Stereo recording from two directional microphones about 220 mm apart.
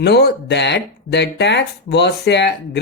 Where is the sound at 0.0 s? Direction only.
50° left (ahead or behind).